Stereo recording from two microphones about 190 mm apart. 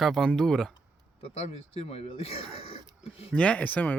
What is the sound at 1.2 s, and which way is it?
Speech, 30° left (ahead or behind).